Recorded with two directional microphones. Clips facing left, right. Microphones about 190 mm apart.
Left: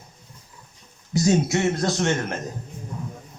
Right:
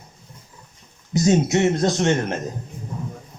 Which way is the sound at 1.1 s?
20° right (ahead or behind).